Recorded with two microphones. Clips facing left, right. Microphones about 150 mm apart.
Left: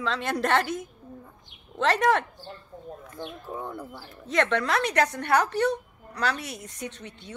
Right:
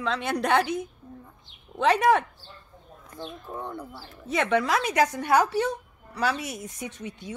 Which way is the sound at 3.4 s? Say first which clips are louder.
Even; centre (ahead or behind).